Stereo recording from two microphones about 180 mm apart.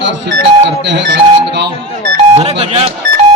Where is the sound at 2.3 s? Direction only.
35° right (ahead or behind).